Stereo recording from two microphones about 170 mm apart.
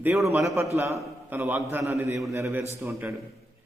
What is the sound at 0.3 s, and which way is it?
A man's voice, 15° right (ahead or behind).